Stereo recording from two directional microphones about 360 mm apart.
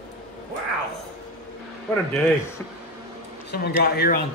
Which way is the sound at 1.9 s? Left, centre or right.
Centre.